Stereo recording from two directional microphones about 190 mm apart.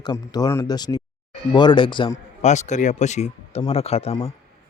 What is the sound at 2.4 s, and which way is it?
A man's voice, 35° left (ahead or behind).